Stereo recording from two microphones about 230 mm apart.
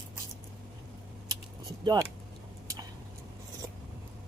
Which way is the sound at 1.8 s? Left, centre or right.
Centre.